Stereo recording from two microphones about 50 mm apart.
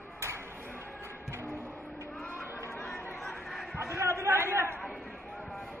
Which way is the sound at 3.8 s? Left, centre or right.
Right.